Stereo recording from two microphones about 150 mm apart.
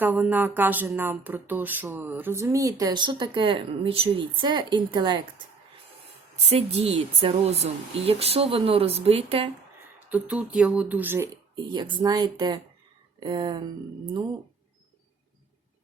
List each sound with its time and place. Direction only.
0.0 s speech: 10° right (ahead or behind); by 5.2 s 30° right (ahead or behind)
6.5 s speech: 45° right (ahead or behind)
10.1 s speech: 10° right (ahead or behind)
11.5 s speech: 30° right (ahead or behind)